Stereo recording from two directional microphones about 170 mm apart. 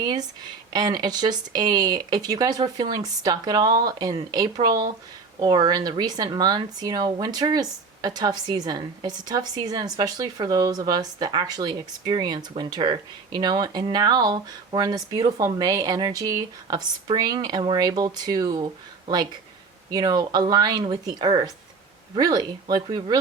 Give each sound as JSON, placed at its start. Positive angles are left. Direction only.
{"t": 0.0, "sound": "speech", "side_deg": -25}